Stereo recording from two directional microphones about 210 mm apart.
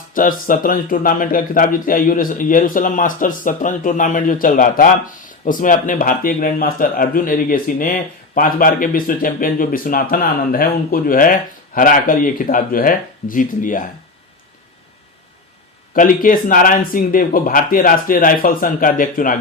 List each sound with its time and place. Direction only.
0.1 s speech: 40° left (ahead or behind)
16.0 s speech: 40° left (ahead or behind)